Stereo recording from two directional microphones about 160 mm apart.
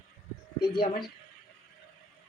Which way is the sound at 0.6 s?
75° left (ahead or behind).